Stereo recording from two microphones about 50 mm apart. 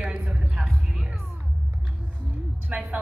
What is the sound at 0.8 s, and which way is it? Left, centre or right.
Music, centre.